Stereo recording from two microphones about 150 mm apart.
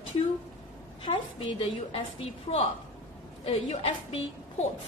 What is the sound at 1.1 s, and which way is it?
A woman's voice, 35° left (ahead or behind).